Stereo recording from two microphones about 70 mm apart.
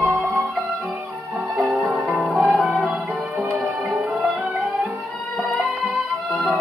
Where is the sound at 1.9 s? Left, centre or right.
Centre.